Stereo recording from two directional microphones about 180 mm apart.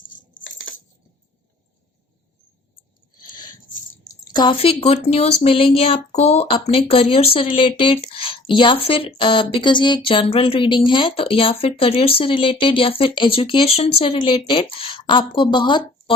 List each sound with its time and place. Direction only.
4.2 s speech: 25° left (ahead or behind)